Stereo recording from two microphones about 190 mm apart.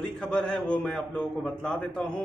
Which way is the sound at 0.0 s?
5° left (ahead or behind).